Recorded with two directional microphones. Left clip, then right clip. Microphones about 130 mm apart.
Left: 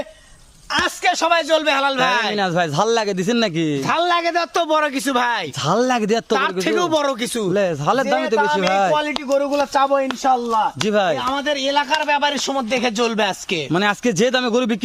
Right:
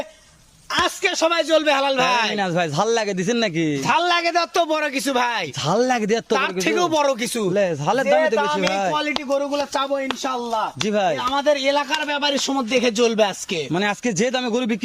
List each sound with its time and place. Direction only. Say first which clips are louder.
0.7 s a sound: left 1 dB; 20° left (ahead or behind)
1.0 s a man's voice: left 5 dB; 35° left (ahead or behind)
3.8 s a man's voice: even; 5° left (ahead or behind)
5.6 s a man's voice: left 2 dB; 25° left (ahead or behind)
6.3 s a man's voice: left 1 dB; 5° left (ahead or behind)
7.5 s a man's voice: left 2 dB; 25° left (ahead or behind)
8.7 s speech: left 4 dB; 40° left (ahead or behind)
11.2 s a man's voice: right 1 dB; 20° left (ahead or behind); by 14.8 s 35° left (ahead or behind)